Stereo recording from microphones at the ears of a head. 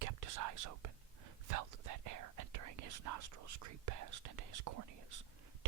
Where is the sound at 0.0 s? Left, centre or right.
Right.